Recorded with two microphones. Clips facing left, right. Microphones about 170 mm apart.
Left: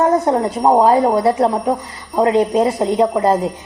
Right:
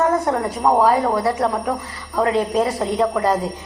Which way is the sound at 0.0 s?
25° left (ahead or behind).